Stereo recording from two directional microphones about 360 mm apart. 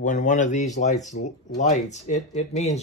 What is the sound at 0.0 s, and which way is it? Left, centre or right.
Speech, left.